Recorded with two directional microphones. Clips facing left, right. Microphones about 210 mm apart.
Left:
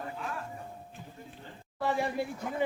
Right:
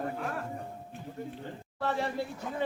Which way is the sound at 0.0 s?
50° right (ahead or behind).